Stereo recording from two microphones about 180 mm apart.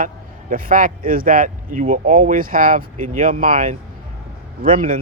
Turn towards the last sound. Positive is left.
turn(degrees=-50)  # may be behind; listen again after turning